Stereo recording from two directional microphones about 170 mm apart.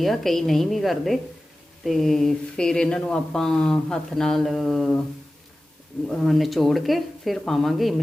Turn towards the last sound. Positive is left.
turn(degrees=0)  # may be behind; listen again after turning